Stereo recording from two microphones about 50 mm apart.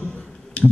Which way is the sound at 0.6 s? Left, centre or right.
Left.